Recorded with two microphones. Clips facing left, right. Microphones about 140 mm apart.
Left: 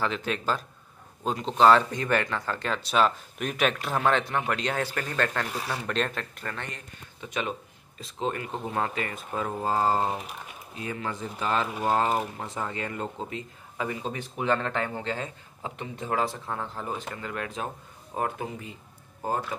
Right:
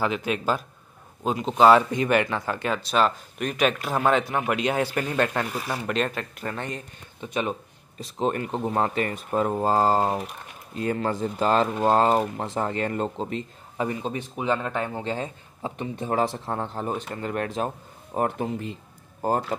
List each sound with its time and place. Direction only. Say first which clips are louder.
0.0 s speech: right 3 dB; 10° right (ahead or behind)
2.9 s speech: even; centre (ahead or behind); by 5.9 s 15° right (ahead or behind)
5.9 s speech: right 3 dB; 5° right (ahead or behind)
6.5 s speech: right 6 dB; 20° right (ahead or behind)
8.6 s speech: right 5 dB; 35° right (ahead or behind)
10.8 s speech: right 8 dB; 45° right (ahead or behind)
14.0 s speech: right 2 dB; 15° right (ahead or behind)
17.1 s speech: right 6 dB; 40° right (ahead or behind)